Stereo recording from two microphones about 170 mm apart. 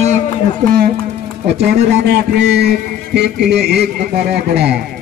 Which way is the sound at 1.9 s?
80° right.